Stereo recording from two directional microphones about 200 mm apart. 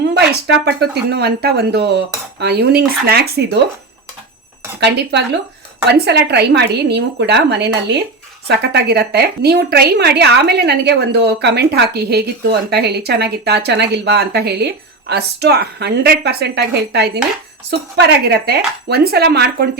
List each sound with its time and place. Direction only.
0.1 s a woman's voice: 55° right (ahead or behind)
4.8 s a woman's voice: 60° right (ahead or behind)